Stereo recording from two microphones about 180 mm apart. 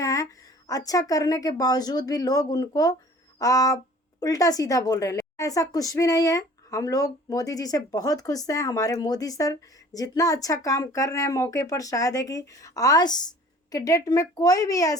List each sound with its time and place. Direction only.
0.0 s a woman's voice: 20° left (ahead or behind)